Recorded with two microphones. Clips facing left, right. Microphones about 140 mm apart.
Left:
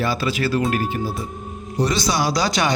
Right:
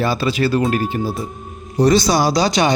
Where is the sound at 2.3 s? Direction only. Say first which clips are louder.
Right 4 dB; 20° right (ahead or behind).